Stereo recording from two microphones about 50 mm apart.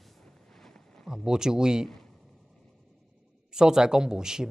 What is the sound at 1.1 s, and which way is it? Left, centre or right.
Speech, centre.